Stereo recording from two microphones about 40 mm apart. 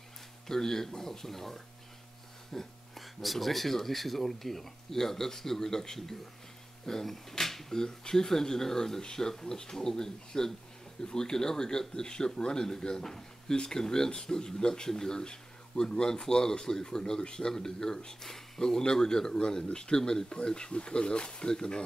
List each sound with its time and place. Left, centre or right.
0.5 s a man's voice: centre
2.9 s a man's voice: centre